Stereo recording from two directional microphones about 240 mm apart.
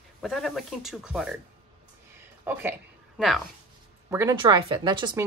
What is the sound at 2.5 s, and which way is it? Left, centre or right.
Speech, centre.